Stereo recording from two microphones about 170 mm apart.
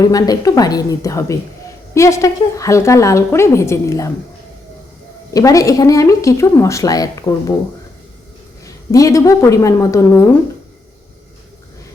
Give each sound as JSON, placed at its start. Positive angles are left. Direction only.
{"t": 0.0, "sound": "a woman's voice", "side_deg": 20}
{"t": 5.3, "sound": "speech", "side_deg": 20}
{"t": 8.6, "sound": "speech", "side_deg": 20}